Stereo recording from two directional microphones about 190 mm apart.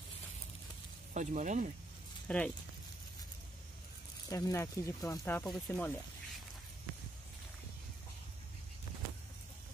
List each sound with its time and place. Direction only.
1.1 s speech: 40° right (ahead or behind)
2.2 s speech: 5° left (ahead or behind)
4.3 s speech: 15° left (ahead or behind)
5.4 s speech: 5° left (ahead or behind)